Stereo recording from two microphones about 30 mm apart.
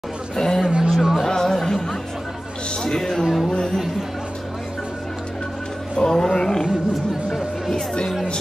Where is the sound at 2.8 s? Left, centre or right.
Centre.